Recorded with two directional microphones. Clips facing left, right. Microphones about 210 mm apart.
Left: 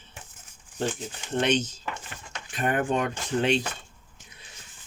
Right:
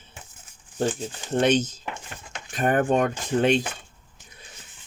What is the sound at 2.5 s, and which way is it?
Speech, 45° right (ahead or behind).